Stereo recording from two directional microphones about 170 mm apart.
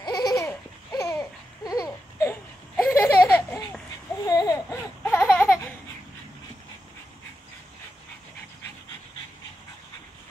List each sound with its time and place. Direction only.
0.0 s laughter: 20° left (ahead or behind)
2.7 s a sound: 10° left (ahead or behind)
4.3 s baby cry: 20° left (ahead or behind)